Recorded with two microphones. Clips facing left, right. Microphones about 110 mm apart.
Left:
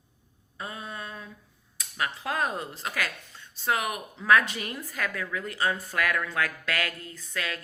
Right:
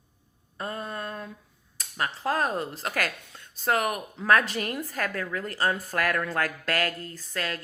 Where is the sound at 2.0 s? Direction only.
35° right (ahead or behind).